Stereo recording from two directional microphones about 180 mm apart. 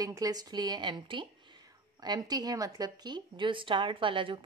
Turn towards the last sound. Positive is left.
turn(degrees=-30)  # may be behind; listen again after turning